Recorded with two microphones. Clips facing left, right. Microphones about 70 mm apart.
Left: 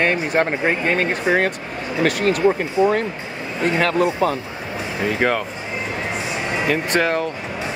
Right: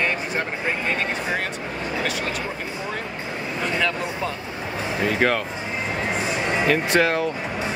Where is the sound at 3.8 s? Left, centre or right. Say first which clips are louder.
Left 9 dB; left.